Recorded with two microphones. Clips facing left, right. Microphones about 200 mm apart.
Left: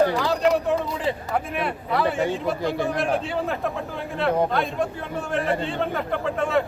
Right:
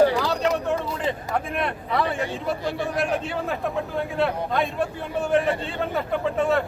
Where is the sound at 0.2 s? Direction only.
Centre (ahead or behind).